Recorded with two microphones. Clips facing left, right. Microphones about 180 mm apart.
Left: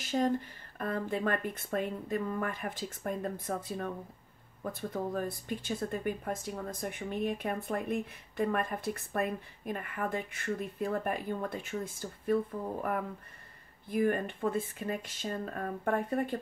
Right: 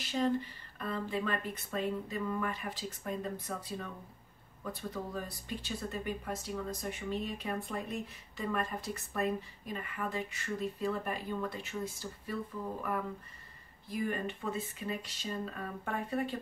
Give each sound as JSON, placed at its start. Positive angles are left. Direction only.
{"t": 0.0, "sound": "speech", "side_deg": 50}
{"t": 13.8, "sound": "speech", "side_deg": 55}